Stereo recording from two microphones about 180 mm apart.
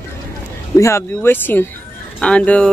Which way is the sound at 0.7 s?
15° left (ahead or behind).